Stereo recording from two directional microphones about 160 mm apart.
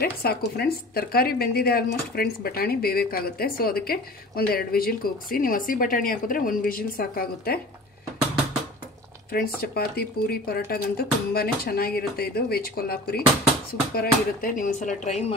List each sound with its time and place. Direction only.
0.0 s speech: 75° left (ahead or behind)
9.3 s speech: 75° left (ahead or behind); by 15.3 s 45° left (ahead or behind)